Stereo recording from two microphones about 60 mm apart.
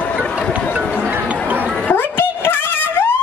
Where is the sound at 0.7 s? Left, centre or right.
Right.